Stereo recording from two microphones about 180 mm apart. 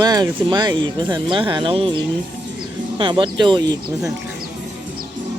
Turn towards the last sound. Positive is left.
turn(degrees=-25)  # may be behind; listen again after turning